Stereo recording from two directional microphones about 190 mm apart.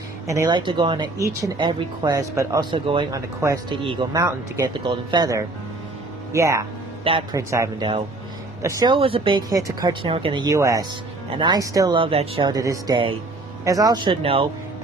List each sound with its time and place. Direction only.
0.3 s speech: 20° right (ahead or behind)